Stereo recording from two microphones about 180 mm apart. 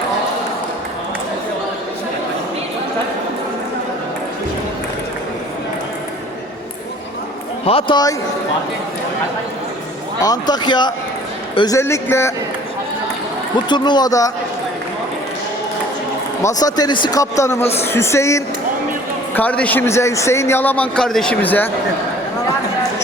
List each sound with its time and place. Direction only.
7.6 s speech: 30° left (ahead or behind)
10.2 s a man's voice: 20° left (ahead or behind)
13.7 s speech: 25° left (ahead or behind)
16.6 s a man's voice: 20° left (ahead or behind)